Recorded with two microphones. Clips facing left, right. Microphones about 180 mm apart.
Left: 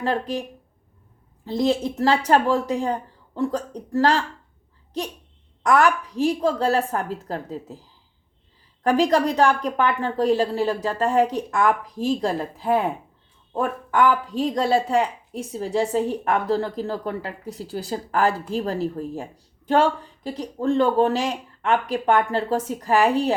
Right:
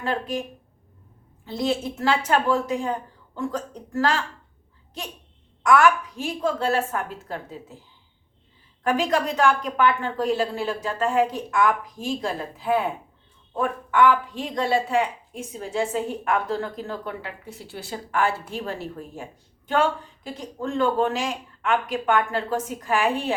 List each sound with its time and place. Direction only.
0.0 s a woman's voice: 35° left (ahead or behind)
1.5 s a woman's voice: 35° left (ahead or behind)
5.6 s a woman's voice: 35° left (ahead or behind)